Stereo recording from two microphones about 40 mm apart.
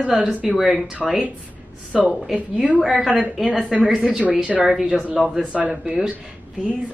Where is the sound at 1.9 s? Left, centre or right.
Centre.